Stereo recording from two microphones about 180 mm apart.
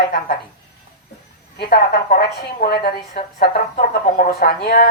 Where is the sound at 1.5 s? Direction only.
65° left (ahead or behind).